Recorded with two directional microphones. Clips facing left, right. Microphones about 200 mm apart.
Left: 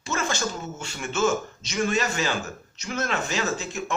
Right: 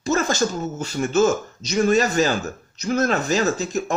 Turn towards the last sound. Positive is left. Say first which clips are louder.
# right 6 dB
turn(degrees=-40)  # may be behind; listen again after turning